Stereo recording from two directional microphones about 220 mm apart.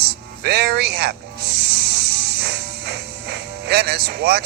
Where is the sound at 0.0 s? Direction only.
45° right (ahead or behind).